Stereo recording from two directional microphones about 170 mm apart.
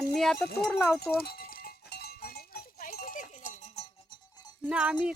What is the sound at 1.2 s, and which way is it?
Livestock, 65° left (ahead or behind).